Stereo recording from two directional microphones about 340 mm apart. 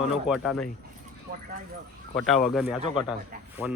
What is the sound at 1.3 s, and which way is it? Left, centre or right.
Speech, right.